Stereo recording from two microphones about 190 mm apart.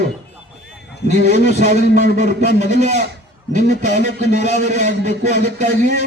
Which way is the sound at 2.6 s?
40° right (ahead or behind).